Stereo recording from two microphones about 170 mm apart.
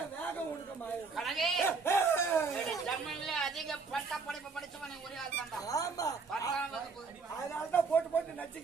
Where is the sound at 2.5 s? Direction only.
Centre (ahead or behind).